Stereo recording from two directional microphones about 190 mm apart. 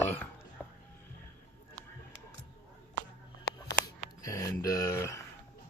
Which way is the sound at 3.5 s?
60° left (ahead or behind).